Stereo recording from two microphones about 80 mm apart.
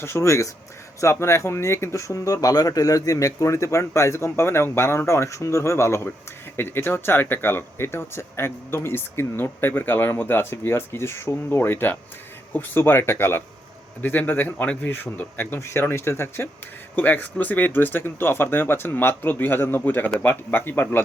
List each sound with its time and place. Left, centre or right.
0.0 s speech: left